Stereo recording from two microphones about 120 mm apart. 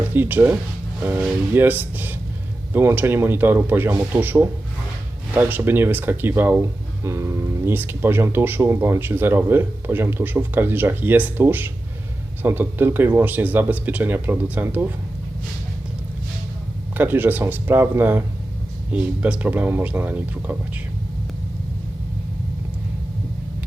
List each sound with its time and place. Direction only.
0.1 s speech: 15° right (ahead or behind)
17.0 s speech: 15° right (ahead or behind)